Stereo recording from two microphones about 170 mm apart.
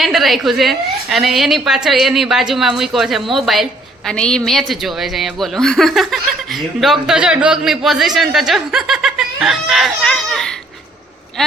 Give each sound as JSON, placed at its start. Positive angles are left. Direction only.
{"t": 0.0, "sound": "a woman's voice", "side_deg": 0}